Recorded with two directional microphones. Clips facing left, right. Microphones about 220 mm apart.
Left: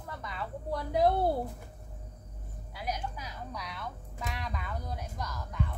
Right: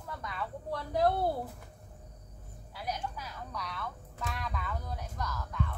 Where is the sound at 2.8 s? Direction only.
15° left (ahead or behind).